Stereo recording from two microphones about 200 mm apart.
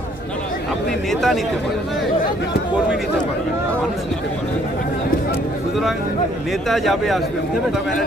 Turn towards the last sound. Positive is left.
turn(degrees=0)  # may be behind; listen again after turning